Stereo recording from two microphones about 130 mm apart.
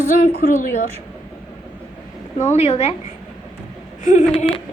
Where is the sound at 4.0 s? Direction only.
75° left (ahead or behind).